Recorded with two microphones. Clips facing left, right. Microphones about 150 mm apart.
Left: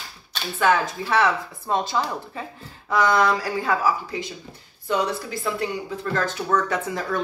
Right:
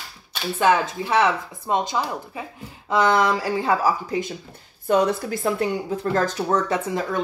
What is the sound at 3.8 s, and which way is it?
Speech, 45° right (ahead or behind).